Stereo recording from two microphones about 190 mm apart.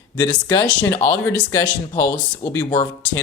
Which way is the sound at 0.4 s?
15° left (ahead or behind).